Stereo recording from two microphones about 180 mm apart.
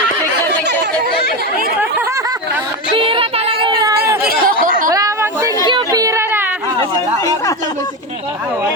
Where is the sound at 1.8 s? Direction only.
15° right (ahead or behind).